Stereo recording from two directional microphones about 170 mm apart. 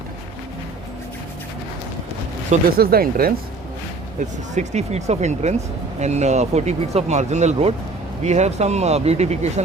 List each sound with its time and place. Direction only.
2.7 s speech: 60° right (ahead or behind)
4.5 s speech: 40° right (ahead or behind)